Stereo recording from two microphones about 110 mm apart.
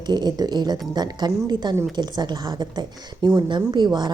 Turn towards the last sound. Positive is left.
turn(degrees=-45)  # may be behind; listen again after turning